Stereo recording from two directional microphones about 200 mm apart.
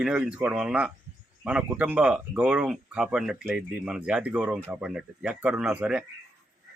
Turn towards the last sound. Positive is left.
turn(degrees=-5)  # may be behind; listen again after turning